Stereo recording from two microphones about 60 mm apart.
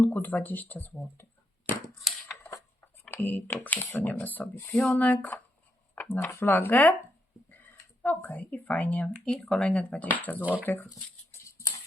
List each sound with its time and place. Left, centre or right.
0.0 s speech: left
2.8 s a sound: left
3.2 s speech: left
4.7 s speech: centre
4.9 s speech: left
8.2 s speech: left
9.2 s speech: centre
9.6 s speech: centre
11.3 s a sound: left